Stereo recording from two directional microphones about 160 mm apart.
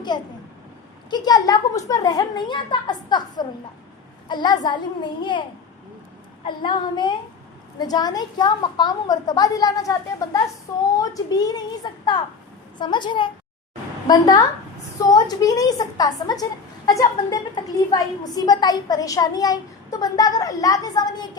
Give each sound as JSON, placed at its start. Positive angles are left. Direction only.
{"t": 0.1, "sound": "a woman's voice", "side_deg": 30}